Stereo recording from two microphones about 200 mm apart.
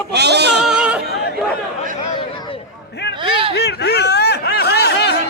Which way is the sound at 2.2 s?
25° left (ahead or behind).